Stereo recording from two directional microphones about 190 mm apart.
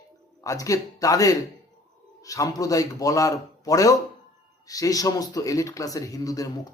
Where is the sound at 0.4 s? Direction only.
15° left (ahead or behind).